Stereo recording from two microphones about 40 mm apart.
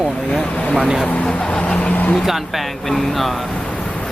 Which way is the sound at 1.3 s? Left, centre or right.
Left.